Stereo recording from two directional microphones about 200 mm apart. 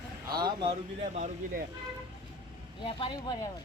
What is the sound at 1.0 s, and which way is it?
Speech, 40° right (ahead or behind).